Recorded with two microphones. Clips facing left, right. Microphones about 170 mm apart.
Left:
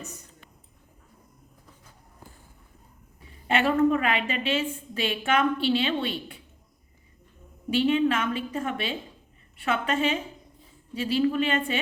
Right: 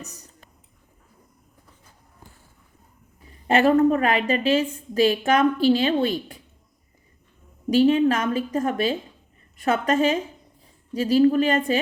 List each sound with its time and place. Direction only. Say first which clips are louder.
3.4 s a woman's voice: right 5 dB; 40° right (ahead or behind)
7.7 s a woman's voice: right 5 dB; 40° right (ahead or behind)